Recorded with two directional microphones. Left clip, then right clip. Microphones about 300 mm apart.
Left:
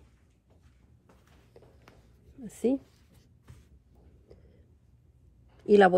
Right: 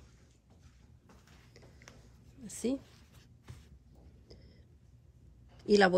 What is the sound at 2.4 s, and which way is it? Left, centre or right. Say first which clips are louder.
Speech: left 7 dB; centre.